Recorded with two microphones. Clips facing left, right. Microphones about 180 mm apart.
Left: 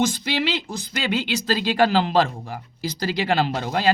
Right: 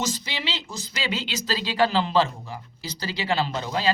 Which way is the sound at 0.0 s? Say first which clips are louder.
Left 8 dB; 55° left (ahead or behind).